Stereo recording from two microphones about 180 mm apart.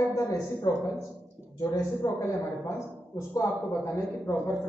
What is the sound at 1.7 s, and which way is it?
Speech, 20° left (ahead or behind).